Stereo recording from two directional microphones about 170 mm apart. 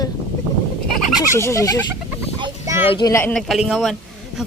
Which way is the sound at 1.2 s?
15° left (ahead or behind).